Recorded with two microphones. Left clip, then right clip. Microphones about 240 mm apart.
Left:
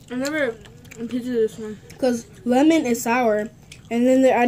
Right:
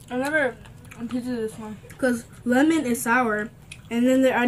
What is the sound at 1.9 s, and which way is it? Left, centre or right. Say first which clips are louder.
A woman's voice: left 2 dB; centre.